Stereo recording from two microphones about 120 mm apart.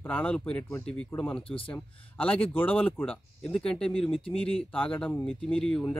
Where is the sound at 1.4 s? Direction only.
50° left (ahead or behind).